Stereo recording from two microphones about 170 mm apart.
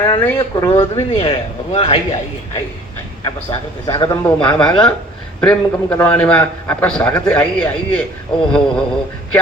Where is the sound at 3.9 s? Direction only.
20° left (ahead or behind).